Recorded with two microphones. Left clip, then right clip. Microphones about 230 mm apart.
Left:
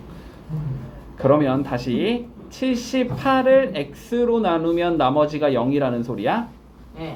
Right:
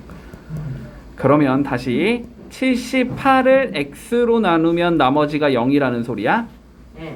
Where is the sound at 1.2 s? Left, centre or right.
Right.